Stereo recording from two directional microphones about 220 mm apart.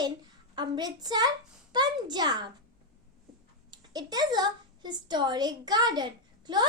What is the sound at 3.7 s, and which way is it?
A woman's voice, 20° right (ahead or behind).